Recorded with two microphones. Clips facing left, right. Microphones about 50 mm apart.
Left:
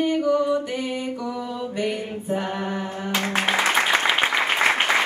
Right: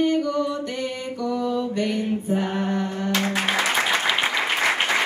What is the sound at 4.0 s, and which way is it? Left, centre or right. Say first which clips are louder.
Applause: left 2 dB; centre.